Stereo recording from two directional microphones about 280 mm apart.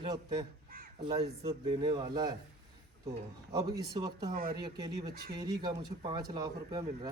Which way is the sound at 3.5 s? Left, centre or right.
Centre.